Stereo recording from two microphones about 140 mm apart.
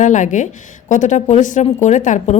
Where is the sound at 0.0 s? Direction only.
60° left (ahead or behind).